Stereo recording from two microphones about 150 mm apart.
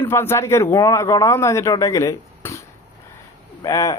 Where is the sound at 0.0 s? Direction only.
15° left (ahead or behind).